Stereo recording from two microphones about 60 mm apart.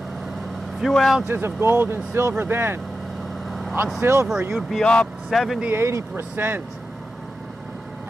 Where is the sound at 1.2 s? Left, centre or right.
Right.